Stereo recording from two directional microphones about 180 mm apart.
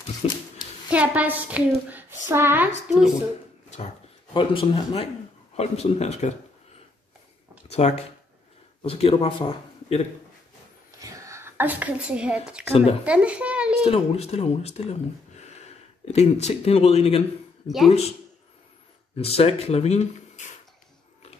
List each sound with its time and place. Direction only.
0.2 s speech: 35° left (ahead or behind)
0.8 s speech: 10° right (ahead or behind)
4.3 s speech: 30° left (ahead or behind)
7.7 s a man's voice: 35° left (ahead or behind)
11.0 s a woman's voice: 15° right (ahead or behind)
13.8 s speech: 35° left (ahead or behind)
16.1 s speech: 35° left (ahead or behind)
17.6 s speech: centre (ahead or behind)
19.1 s speech: 35° left (ahead or behind)